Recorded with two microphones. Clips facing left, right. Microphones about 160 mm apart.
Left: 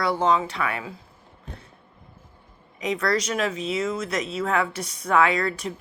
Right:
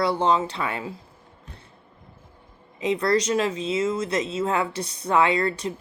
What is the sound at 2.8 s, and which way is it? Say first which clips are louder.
Speech: right 3 dB; 30° right (ahead or behind).